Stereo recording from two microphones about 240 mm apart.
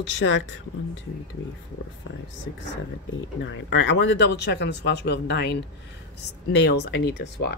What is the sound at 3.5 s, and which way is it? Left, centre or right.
Speech, left.